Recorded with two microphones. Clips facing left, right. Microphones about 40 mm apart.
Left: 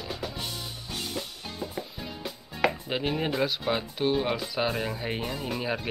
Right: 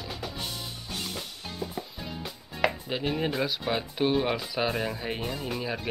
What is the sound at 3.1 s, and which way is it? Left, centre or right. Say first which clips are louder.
Speech: left 1 dB; centre.